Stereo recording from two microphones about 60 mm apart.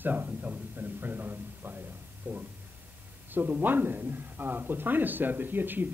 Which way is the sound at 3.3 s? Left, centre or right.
Right.